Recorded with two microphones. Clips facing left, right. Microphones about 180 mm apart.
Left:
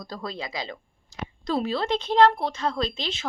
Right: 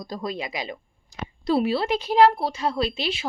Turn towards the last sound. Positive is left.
turn(degrees=-10)  # may be behind; listen again after turning